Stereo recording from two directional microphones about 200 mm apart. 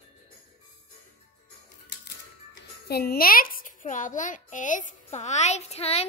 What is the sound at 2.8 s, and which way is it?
A child's voice, 50° left (ahead or behind).